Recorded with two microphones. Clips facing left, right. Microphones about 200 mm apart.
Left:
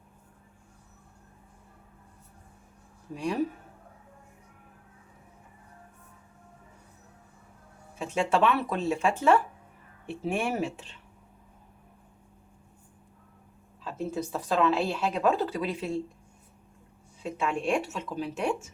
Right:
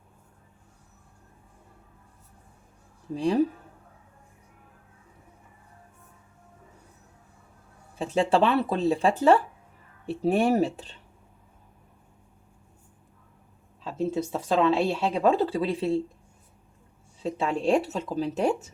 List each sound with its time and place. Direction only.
3.2 s speech: 35° right (ahead or behind)
7.9 s speech: 35° right (ahead or behind)
13.8 s speech: 25° right (ahead or behind)
17.2 s speech: 35° right (ahead or behind)